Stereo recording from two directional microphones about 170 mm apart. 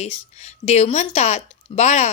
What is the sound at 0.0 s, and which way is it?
A woman's voice, 40° left (ahead or behind).